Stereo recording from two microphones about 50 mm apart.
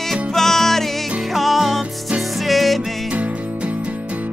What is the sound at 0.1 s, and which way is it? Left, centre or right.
Music, centre.